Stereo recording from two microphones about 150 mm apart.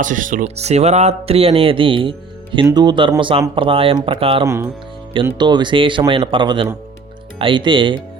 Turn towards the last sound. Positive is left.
turn(degrees=-35)  # may be behind; listen again after turning